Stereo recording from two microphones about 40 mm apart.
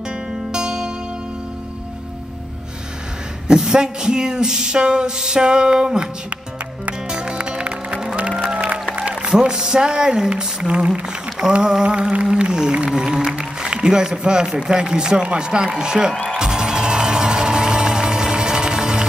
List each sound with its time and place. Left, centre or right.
0.5 s music: centre
3.4 s a sound: centre
7.1 s music: right
8.9 s speech: right
10.3 s a sound: right
12.9 s music: centre
13.3 s speech: right
16.3 s music: centre